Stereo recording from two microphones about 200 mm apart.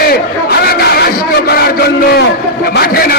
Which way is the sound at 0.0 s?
50° left (ahead or behind).